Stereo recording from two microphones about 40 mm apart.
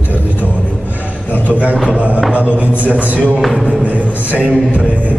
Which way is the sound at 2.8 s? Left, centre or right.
Right.